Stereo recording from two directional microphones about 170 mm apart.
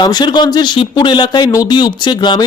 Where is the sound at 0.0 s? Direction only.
25° left (ahead or behind).